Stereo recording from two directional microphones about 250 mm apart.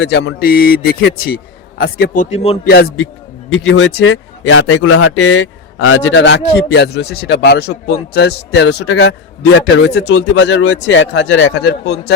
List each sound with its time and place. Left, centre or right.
0.0 s speech: left
2.3 s speech: left
2.6 s a man's voice: left